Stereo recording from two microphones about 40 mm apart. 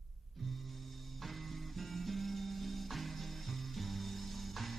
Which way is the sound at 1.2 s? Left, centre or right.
Centre.